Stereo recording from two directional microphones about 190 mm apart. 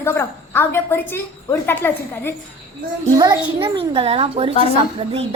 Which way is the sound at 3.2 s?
20° right (ahead or behind).